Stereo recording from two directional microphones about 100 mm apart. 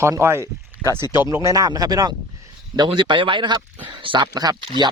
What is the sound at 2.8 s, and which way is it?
Speech, 55° right (ahead or behind).